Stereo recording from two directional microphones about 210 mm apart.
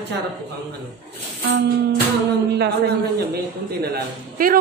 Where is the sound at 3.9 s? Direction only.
45° right (ahead or behind).